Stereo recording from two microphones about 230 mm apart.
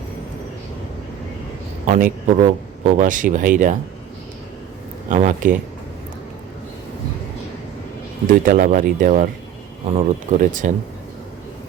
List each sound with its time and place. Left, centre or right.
1.9 s speech: right
5.0 s speech: right
8.3 s speech: right